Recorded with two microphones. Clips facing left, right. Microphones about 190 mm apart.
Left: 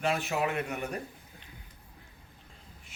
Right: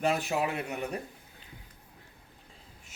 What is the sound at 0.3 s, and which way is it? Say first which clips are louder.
Speech: even; 15° right (ahead or behind).